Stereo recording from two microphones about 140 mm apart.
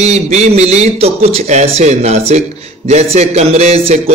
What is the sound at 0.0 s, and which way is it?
A man's voice, 55° right (ahead or behind).